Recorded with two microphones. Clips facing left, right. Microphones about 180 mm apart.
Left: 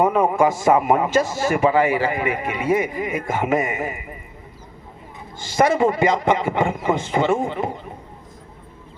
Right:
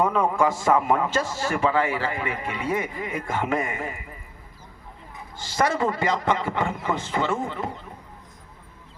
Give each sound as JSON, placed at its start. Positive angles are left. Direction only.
{"t": 0.0, "sound": "a man's voice", "side_deg": 15}
{"t": 5.5, "sound": "a man's voice", "side_deg": 15}